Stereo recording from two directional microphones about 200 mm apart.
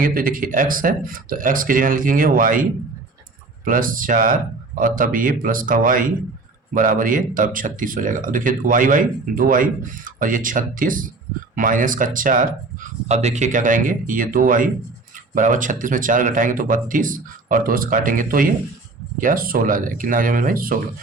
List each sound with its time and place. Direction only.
0.0 s speech: 45° right (ahead or behind)